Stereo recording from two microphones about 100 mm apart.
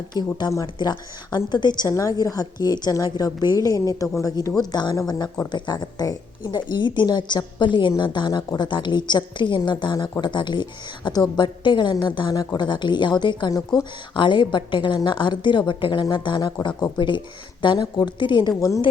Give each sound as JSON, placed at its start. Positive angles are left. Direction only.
{"t": 0.1, "sound": "speech", "side_deg": 45}
{"t": 1.9, "sound": "a woman's voice", "side_deg": 35}
{"t": 14.1, "sound": "speech", "side_deg": 55}